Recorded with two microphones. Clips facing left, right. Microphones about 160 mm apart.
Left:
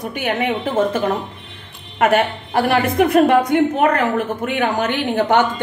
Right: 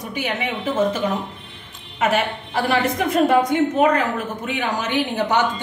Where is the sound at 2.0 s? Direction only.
60° left (ahead or behind).